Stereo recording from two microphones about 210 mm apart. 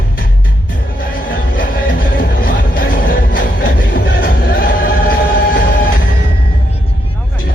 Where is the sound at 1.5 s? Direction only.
40° left (ahead or behind).